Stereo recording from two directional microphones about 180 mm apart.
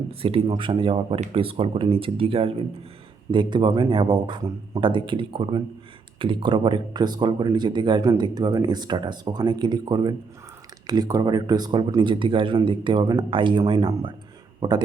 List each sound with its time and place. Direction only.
0.1 s a man's voice: 30° right (ahead or behind)